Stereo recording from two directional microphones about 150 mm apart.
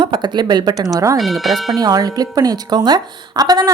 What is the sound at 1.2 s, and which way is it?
Speech, centre (ahead or behind).